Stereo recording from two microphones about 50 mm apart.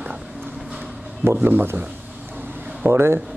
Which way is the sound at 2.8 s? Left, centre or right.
Right.